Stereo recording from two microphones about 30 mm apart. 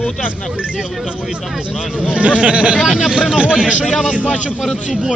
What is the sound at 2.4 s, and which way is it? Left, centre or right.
Speech, right.